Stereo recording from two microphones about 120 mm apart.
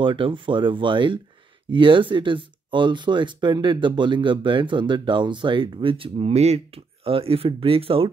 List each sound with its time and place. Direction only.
0.0 s speech: 45° right (ahead or behind)